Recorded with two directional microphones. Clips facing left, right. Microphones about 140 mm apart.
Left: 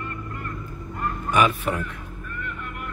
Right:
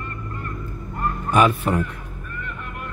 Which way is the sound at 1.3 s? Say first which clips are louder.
Right 3 dB; 35° right (ahead or behind).